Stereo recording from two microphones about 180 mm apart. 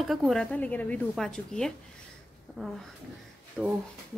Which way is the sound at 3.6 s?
15° right (ahead or behind).